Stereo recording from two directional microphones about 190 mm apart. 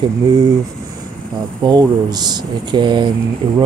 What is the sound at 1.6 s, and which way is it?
Speech, 20° right (ahead or behind).